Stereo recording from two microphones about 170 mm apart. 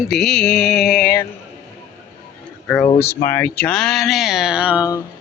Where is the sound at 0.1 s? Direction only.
Centre (ahead or behind).